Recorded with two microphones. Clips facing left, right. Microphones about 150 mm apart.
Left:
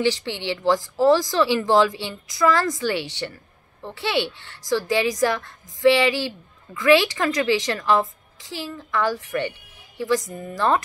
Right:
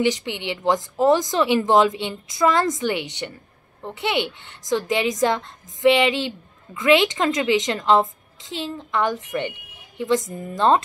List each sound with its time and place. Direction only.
0.0 s a woman's voice: 15° right (ahead or behind)